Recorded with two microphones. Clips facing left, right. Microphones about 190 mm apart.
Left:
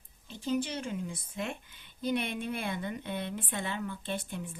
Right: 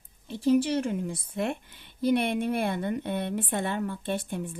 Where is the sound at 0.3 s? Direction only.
65° right (ahead or behind).